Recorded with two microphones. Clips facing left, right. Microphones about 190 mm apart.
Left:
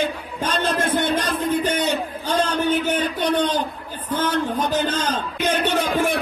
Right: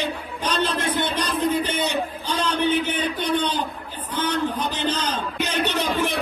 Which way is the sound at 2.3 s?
45° left (ahead or behind).